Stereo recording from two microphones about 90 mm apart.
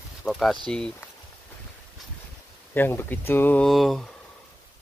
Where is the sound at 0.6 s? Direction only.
10° left (ahead or behind).